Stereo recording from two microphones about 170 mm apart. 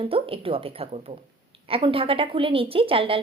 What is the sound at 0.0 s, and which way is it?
A woman's voice, 35° right (ahead or behind).